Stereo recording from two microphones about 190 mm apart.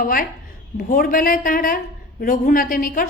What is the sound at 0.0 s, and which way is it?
A woman's voice, 50° left (ahead or behind).